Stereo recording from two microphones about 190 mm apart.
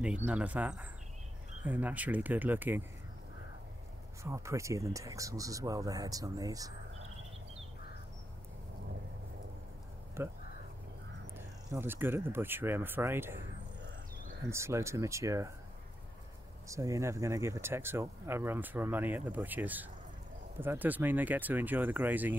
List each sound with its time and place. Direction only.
0.0 s speech: 5° right (ahead or behind)
4.2 s speech: 15° right (ahead or behind)
10.2 s speech: 15° right (ahead or behind)
11.3 s speech: 10° right (ahead or behind)
14.5 s speech: 15° right (ahead or behind)
16.6 s speech: 15° right (ahead or behind)